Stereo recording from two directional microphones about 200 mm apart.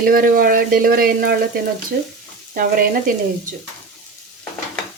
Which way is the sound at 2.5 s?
45° right (ahead or behind).